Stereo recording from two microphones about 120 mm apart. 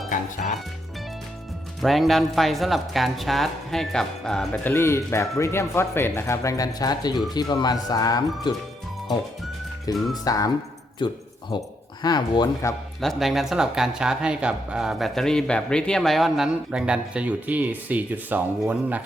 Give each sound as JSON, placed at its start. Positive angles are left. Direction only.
{"t": 0.4, "sound": "music", "side_deg": 90}
{"t": 1.8, "sound": "speech", "side_deg": 0}
{"t": 4.6, "sound": "speech", "side_deg": 20}
{"t": 9.9, "sound": "speech", "side_deg": 30}
{"t": 11.0, "sound": "speech", "side_deg": 40}
{"t": 13.0, "sound": "speech", "side_deg": 0}